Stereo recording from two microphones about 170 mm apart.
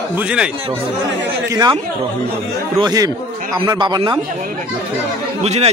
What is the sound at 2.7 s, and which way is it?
Speech, 25° right (ahead or behind).